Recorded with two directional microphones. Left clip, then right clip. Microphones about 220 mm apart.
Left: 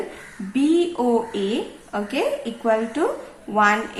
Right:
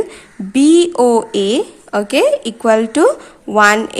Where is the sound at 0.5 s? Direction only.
50° right (ahead or behind).